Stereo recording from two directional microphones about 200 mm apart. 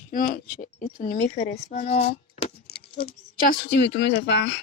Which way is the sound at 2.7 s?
50° left (ahead or behind).